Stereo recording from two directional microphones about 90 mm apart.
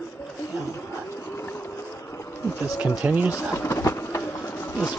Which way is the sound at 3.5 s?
30° left (ahead or behind).